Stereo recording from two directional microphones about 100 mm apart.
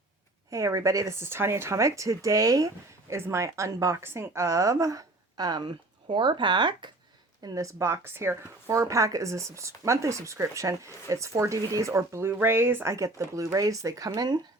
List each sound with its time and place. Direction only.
0.5 s speech: 35° right (ahead or behind); by 6.9 s 50° right (ahead or behind)
7.4 s speech: 35° right (ahead or behind)